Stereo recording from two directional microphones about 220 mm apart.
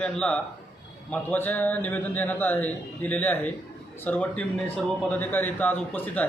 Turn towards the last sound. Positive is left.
turn(degrees=5)  # may be behind; listen again after turning